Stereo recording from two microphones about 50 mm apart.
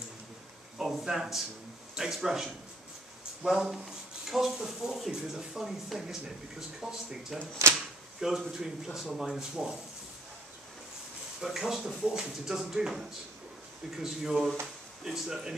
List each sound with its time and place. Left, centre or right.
0.7 s speech: centre
11.4 s speech: centre